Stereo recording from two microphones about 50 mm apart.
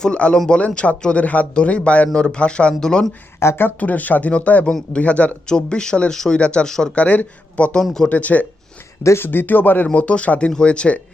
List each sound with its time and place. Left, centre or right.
0.0 s speech: left
3.4 s speech: left
3.8 s speech: left; by 6.4 s centre
6.4 s speech: left
6.7 s speech: centre
6.9 s speech: left
9.1 s speech: left
9.9 s speech: left